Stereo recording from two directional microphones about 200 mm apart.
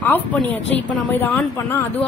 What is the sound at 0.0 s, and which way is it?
A woman's voice, 10° left (ahead or behind).